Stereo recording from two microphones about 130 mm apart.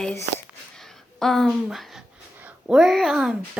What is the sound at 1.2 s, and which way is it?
Speech, 5° left (ahead or behind).